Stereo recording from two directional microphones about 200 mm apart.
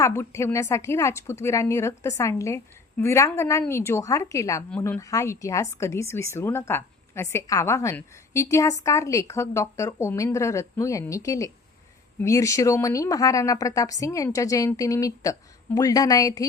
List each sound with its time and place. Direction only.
0.0 s a woman's voice: 15° left (ahead or behind)